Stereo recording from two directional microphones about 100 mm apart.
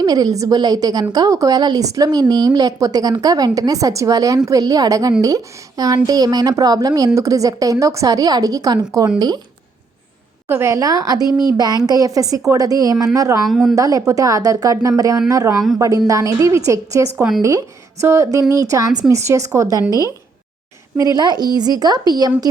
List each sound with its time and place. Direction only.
0.0 s a woman's voice: 40° right (ahead or behind)
10.5 s a woman's voice: 25° right (ahead or behind)
13.5 s a woman's voice: centre (ahead or behind)
13.7 s a woman's voice: 35° right (ahead or behind)